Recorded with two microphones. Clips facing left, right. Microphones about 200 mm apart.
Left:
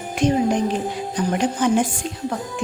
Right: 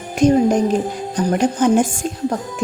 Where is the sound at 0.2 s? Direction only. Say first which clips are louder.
Right 5 dB; 40° right (ahead or behind).